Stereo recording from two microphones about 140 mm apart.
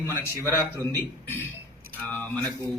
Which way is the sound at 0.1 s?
20° right (ahead or behind).